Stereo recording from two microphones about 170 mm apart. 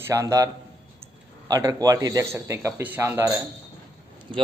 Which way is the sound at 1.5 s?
20° right (ahead or behind).